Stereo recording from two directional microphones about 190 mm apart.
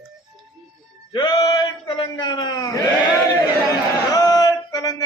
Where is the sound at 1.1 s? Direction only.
25° left (ahead or behind).